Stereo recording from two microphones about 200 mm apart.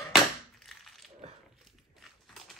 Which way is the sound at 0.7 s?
Centre (ahead or behind).